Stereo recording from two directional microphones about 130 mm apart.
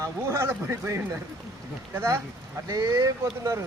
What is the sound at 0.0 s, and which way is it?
Speech, 20° right (ahead or behind).